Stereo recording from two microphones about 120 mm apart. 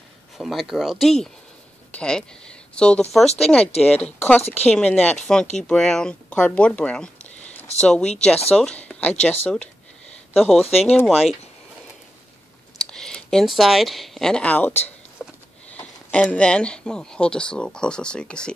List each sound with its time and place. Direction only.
0.4 s speech: centre (ahead or behind)
4.4 s speech: 60° left (ahead or behind)
4.6 s speech: 10° left (ahead or behind)
10.3 s speech: centre (ahead or behind)
12.7 s speech: 5° left (ahead or behind)
15.2 s a sound: 5° left (ahead or behind)
16.1 s speech: 10° left (ahead or behind)